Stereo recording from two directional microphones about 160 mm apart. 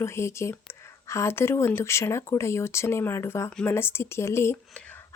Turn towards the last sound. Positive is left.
turn(degrees=15)  # may be behind; listen again after turning